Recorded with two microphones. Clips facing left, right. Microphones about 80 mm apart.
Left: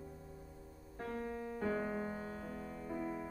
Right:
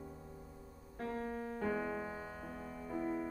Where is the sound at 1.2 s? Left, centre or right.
Centre.